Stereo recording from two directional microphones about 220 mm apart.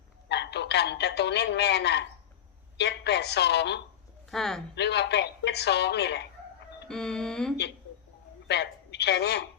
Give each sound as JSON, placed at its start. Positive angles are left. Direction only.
{"t": 0.3, "sound": "a woman's voice", "side_deg": 50}
{"t": 4.3, "sound": "music", "side_deg": 0}
{"t": 4.7, "sound": "a woman's voice", "side_deg": 50}
{"t": 6.8, "sound": "music", "side_deg": 5}
{"t": 8.4, "sound": "a man's voice", "side_deg": 50}